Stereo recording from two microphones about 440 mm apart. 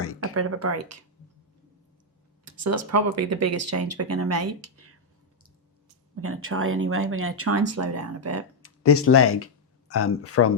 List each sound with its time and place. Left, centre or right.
0.0 s a sound: left
0.3 s speech: right
2.4 s speech: right
6.1 s speech: right
8.6 s speech: left